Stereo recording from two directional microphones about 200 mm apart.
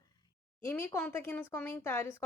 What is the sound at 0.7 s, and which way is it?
Speech, 10° left (ahead or behind).